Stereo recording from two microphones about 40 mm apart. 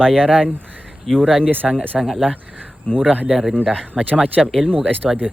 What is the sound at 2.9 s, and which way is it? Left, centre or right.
Speech, left.